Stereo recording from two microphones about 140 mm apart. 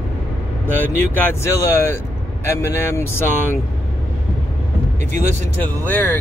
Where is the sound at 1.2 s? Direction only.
15° left (ahead or behind).